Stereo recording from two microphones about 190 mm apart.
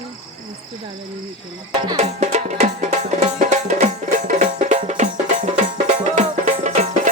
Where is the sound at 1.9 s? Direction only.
35° right (ahead or behind).